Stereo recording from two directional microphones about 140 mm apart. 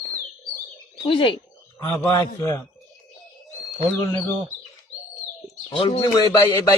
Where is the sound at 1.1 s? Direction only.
35° left (ahead or behind).